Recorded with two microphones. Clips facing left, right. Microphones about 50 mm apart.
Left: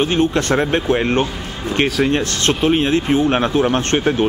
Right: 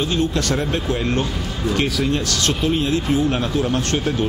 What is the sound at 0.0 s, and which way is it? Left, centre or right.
Speech, left.